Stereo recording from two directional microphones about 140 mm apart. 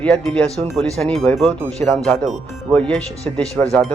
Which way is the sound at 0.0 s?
5° left (ahead or behind).